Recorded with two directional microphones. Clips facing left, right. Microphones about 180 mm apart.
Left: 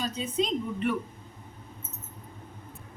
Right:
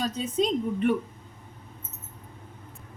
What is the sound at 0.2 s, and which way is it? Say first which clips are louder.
Speech: right 3 dB; 45° right (ahead or behind).